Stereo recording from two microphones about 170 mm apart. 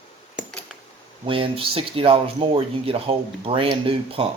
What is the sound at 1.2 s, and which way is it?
Speech, 30° right (ahead or behind).